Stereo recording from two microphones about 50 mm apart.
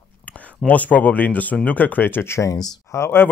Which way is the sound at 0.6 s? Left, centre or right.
Left.